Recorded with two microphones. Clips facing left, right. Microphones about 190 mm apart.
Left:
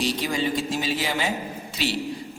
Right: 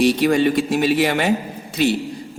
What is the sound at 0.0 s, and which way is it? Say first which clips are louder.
Speech: right 10 dB; 65° right (ahead or behind).